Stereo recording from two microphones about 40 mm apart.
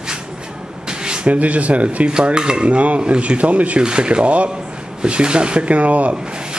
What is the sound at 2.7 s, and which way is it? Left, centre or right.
Speech, right.